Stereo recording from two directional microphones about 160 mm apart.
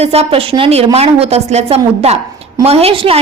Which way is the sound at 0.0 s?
40° right (ahead or behind).